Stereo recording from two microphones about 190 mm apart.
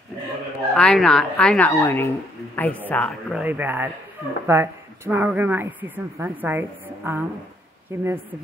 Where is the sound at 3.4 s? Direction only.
10° right (ahead or behind).